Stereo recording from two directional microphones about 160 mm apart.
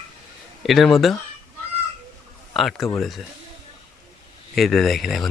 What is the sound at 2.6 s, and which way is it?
Speech, centre (ahead or behind).